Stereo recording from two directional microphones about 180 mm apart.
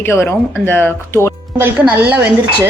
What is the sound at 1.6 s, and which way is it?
Speech, 10° right (ahead or behind).